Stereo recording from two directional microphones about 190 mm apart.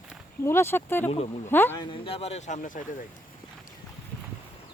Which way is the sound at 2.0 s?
30° left (ahead or behind).